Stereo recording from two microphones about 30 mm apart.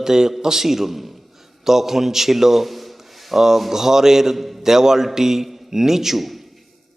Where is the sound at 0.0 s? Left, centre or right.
Centre.